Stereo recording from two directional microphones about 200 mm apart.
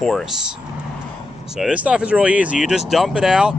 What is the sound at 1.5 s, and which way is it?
Speech, 5° right (ahead or behind).